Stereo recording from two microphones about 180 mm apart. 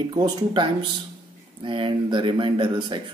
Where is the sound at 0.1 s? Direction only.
25° right (ahead or behind).